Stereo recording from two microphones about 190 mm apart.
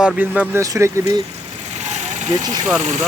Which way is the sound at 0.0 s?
10° right (ahead or behind).